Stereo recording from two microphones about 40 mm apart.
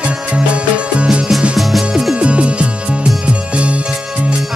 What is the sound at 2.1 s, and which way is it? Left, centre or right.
Music, right.